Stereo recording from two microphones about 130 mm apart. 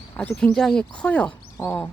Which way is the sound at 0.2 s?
10° left (ahead or behind).